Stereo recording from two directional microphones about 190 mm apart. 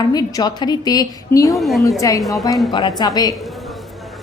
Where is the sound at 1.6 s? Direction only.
Centre (ahead or behind).